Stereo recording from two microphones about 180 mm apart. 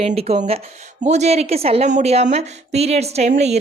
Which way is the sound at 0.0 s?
35° right (ahead or behind).